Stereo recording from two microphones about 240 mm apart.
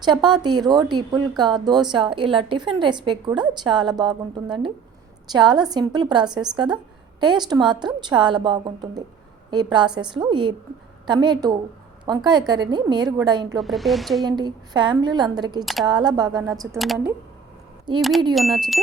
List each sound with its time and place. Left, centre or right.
0.0 s a woman's voice: centre
13.6 s a woman's voice: centre
14.3 s a woman's voice: centre
15.6 s a woman's voice: centre
15.9 s a woman's voice: centre
16.7 s a woman's voice: centre
18.3 s a woman's voice: centre